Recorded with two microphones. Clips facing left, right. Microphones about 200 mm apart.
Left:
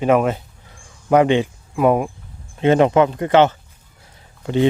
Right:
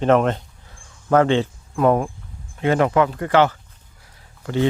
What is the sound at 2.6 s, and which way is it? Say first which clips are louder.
Speech: left 4 dB; 25° left (ahead or behind).